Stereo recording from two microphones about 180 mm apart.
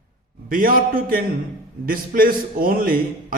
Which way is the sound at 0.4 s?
50° right (ahead or behind).